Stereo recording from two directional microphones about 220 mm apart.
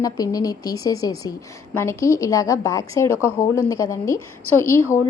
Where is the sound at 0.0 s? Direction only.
15° left (ahead or behind).